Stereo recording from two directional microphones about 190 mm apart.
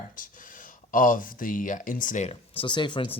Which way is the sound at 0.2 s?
45° left (ahead or behind).